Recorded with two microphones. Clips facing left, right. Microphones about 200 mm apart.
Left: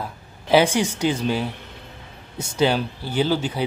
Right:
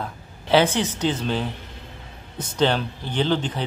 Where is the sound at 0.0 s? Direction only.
10° left (ahead or behind).